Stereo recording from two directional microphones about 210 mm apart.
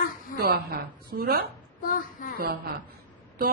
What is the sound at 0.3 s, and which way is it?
A woman's voice, 45° right (ahead or behind).